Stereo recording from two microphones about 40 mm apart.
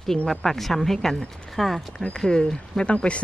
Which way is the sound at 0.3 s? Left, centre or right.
Centre.